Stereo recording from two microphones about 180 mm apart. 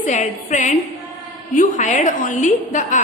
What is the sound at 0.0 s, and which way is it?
A woman's voice, 45° left (ahead or behind).